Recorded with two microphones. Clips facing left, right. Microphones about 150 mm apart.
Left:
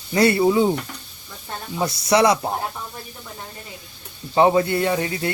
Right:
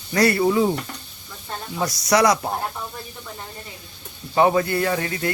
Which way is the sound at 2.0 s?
25° left (ahead or behind).